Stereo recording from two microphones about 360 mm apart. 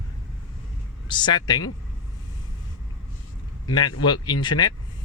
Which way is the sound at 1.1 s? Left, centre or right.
Centre.